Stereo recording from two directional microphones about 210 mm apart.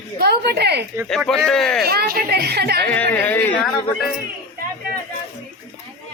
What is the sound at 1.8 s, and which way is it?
A woman's voice, 45° right (ahead or behind).